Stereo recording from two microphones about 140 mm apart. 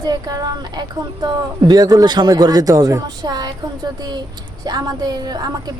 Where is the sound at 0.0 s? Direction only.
30° right (ahead or behind).